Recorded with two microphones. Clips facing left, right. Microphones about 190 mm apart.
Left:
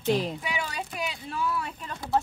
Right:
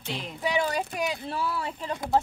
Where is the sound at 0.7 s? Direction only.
40° right (ahead or behind).